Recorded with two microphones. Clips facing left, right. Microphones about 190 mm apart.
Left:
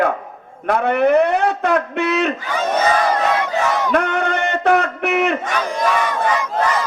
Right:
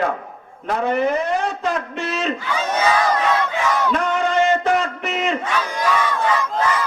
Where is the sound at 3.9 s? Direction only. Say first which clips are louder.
Even; 60° left (ahead or behind).